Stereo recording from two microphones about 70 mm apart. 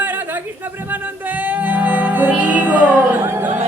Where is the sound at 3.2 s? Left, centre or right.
Right.